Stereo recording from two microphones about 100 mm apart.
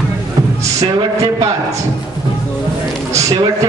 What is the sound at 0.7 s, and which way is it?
Speech, 35° right (ahead or behind).